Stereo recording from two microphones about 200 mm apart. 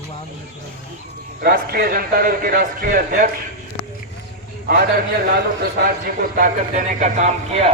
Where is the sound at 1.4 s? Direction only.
50° right (ahead or behind).